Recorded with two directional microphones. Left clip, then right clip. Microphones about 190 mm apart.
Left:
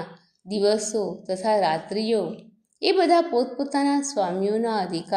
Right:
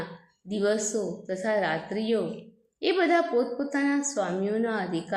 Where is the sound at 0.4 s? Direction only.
20° left (ahead or behind).